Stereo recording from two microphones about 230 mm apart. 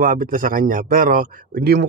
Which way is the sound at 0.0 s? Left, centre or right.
Right.